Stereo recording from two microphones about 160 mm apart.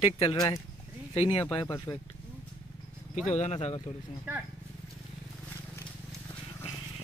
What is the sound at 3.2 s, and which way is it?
Speech, 45° left (ahead or behind).